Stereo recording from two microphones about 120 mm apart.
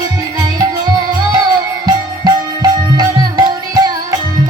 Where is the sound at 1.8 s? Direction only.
35° right (ahead or behind).